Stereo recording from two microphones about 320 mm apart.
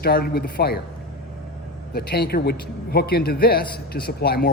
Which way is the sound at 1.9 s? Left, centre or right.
Left.